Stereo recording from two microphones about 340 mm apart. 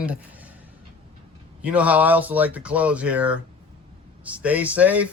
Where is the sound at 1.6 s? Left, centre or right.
Centre.